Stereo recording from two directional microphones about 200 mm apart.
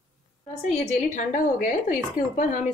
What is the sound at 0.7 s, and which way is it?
A woman's voice, 35° left (ahead or behind).